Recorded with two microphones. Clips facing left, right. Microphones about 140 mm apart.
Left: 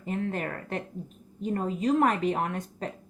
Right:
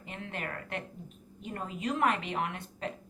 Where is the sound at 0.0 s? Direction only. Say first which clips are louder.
Left 9 dB; 40° left (ahead or behind).